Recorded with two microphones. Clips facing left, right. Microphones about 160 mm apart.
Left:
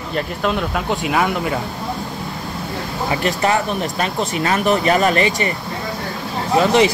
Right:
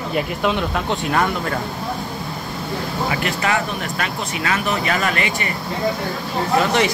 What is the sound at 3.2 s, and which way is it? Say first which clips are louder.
Speech: left 7 dB; 35° left (ahead or behind).